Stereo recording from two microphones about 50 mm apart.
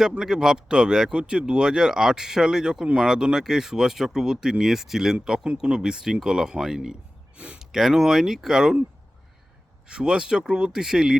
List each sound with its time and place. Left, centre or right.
0.2 s speech: centre
7.3 s speech: right
7.6 s speech: centre
9.9 s speech: centre